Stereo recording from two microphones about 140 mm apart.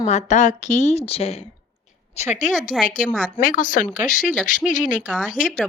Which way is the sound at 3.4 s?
70° left (ahead or behind).